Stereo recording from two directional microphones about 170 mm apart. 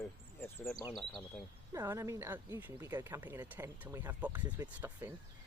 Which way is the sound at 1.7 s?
15° right (ahead or behind).